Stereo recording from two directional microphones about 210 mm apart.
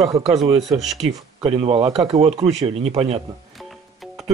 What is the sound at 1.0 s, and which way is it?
Speech, 30° right (ahead or behind).